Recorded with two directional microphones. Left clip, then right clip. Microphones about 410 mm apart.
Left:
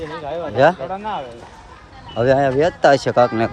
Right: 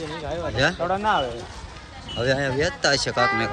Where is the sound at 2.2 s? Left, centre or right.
Centre.